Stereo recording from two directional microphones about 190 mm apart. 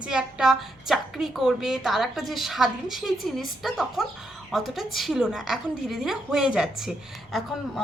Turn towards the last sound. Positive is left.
turn(degrees=0)  # may be behind; listen again after turning